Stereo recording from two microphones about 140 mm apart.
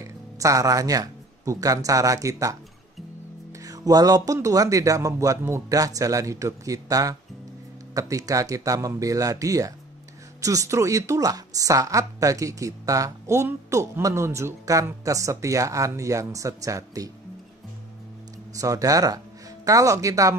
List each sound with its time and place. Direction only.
0.0 s speech: 25° right (ahead or behind)
3.5 s a woman's voice: 25° right (ahead or behind)
18.6 s speech: 25° right (ahead or behind)